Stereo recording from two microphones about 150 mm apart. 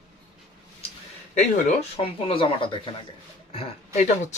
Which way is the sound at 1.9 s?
40° left (ahead or behind).